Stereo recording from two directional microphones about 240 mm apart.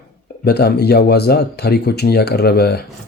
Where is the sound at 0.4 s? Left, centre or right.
Left.